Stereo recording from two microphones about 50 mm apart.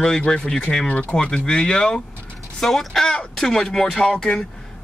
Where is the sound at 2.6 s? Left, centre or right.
Centre.